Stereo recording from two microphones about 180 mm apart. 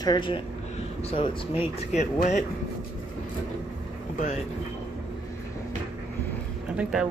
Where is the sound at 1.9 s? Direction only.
40° left (ahead or behind).